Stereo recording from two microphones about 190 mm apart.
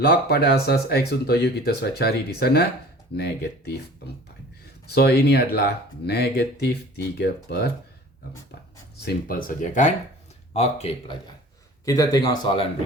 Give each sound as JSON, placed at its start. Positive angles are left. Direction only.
{"t": 0.0, "sound": "speech", "side_deg": 60}
{"t": 4.9, "sound": "speech", "side_deg": 60}
{"t": 9.0, "sound": "speech", "side_deg": 50}
{"t": 11.9, "sound": "speech", "side_deg": 20}